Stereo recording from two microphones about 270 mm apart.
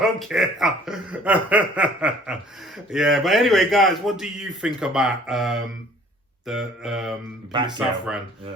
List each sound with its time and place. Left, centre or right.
0.0 s speech: centre
7.5 s speech: centre
7.8 s speech: centre